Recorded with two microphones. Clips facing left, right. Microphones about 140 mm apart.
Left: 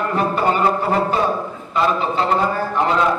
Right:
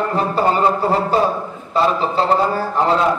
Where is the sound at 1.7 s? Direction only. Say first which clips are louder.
Right 2 dB; 35° right (ahead or behind).